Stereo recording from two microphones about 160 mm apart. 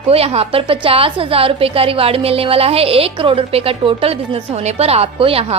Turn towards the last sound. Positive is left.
turn(degrees=-35)  # may be behind; listen again after turning